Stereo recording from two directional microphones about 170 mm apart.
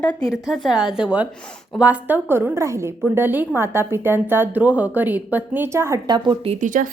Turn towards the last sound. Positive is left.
turn(degrees=-50)  # may be behind; listen again after turning